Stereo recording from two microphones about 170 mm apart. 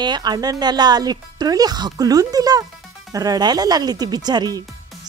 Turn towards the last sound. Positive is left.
turn(degrees=-25)  # may be behind; listen again after turning